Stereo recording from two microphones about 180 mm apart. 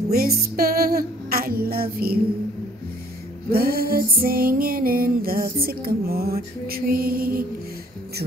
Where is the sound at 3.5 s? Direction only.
55° right (ahead or behind).